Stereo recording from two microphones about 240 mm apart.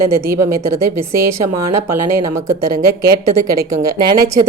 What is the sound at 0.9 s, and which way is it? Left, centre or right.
Speech, right.